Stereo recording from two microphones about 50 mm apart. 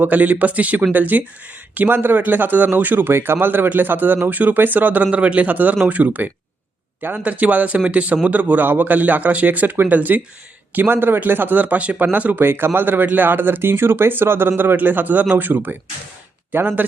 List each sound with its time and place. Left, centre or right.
0.0 s speech: right
3.1 s a man's voice: right